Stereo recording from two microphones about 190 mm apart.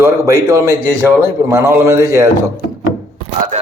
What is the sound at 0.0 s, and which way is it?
A man's voice, 15° right (ahead or behind).